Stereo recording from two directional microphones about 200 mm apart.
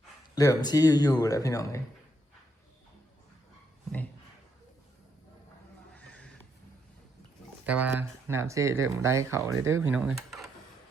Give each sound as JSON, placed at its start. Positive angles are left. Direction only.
{"t": 0.3, "sound": "speech", "side_deg": 20}
{"t": 5.9, "sound": "neigh", "side_deg": 5}
{"t": 7.6, "sound": "speech", "side_deg": -10}